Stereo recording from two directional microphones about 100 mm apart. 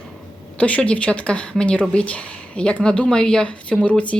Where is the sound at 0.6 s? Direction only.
15° left (ahead or behind).